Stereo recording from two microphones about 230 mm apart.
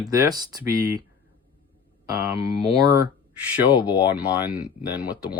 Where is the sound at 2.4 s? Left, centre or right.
Centre.